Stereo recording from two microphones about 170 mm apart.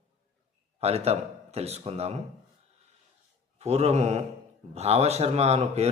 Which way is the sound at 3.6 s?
40° right (ahead or behind).